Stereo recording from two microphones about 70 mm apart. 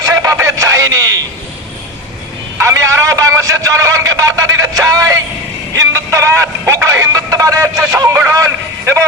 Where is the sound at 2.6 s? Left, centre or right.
Right.